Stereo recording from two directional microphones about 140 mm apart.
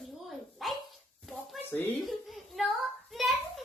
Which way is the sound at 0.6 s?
Centre (ahead or behind).